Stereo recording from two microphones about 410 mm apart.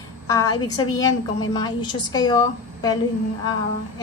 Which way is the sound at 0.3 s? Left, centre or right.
Centre.